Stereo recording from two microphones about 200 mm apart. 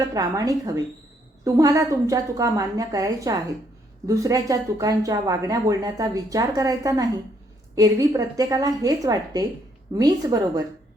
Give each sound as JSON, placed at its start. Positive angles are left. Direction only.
{"t": 0.0, "sound": "a woman's voice", "side_deg": -15}